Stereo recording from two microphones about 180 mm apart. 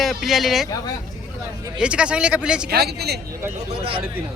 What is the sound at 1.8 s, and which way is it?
Speech, 5° right (ahead or behind).